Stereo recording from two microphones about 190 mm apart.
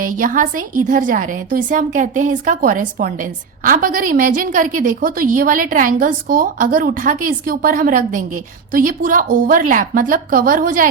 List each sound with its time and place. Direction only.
0.2 s a woman's voice: 45° right (ahead or behind)